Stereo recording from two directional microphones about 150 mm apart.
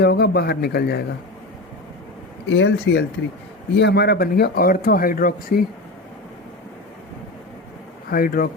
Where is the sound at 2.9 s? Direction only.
90° left; by 5.6 s 70° left (ahead or behind).